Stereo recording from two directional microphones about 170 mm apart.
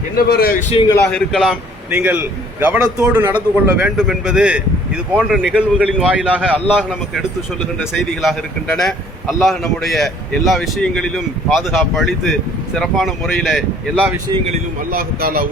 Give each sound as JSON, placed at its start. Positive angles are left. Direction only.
{"t": 0.2, "sound": "a man's voice", "side_deg": 65}
{"t": 1.1, "sound": "a man's voice", "side_deg": 0}
{"t": 1.9, "sound": "a man's voice", "side_deg": -10}
{"t": 14.8, "sound": "a man's voice", "side_deg": -60}